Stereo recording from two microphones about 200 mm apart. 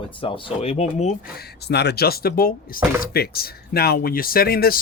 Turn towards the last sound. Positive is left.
turn(degrees=50)  # may be behind; listen again after turning